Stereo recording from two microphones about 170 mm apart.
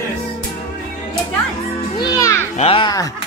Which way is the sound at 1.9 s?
25° left (ahead or behind).